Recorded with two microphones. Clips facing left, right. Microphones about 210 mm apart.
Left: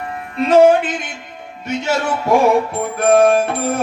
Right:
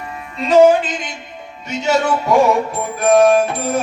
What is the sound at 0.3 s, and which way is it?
Music, 60° left (ahead or behind).